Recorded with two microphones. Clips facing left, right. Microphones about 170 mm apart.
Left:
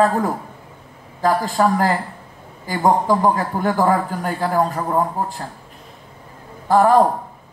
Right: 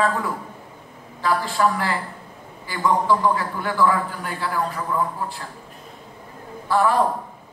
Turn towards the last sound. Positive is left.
turn(degrees=45)  # may be behind; listen again after turning